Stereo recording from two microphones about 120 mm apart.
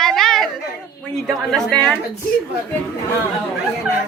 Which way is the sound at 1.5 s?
10° left (ahead or behind).